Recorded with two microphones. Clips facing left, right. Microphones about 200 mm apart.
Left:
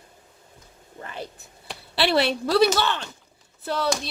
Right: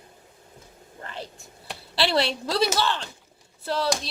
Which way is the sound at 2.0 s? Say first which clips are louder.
Left 3 dB; 60° left (ahead or behind).